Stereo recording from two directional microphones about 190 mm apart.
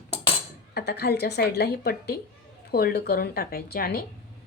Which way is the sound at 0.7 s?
55° left (ahead or behind).